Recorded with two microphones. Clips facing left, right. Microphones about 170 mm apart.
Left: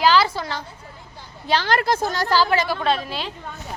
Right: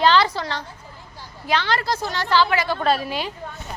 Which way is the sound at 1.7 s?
50° left (ahead or behind).